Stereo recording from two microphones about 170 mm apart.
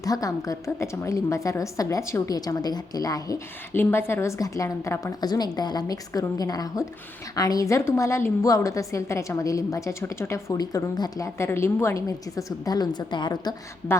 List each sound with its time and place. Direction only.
0.0 s a woman's voice: 20° left (ahead or behind)